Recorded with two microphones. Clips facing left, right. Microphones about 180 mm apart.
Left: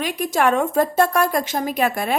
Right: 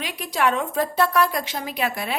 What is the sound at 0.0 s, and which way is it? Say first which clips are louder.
A woman's voice: left 4 dB; 45° left (ahead or behind).